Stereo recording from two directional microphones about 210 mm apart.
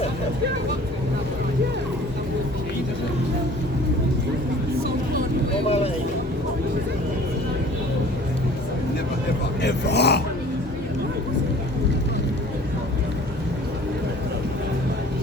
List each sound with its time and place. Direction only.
5.6 s vehicle: 30° left (ahead or behind)
9.6 s grunt: 55° left (ahead or behind)